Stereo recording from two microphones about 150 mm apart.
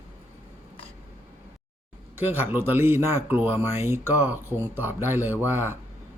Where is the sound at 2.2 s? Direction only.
15° right (ahead or behind).